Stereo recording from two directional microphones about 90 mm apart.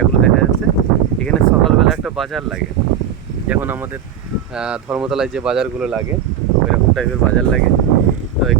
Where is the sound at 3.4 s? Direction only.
20° right (ahead or behind).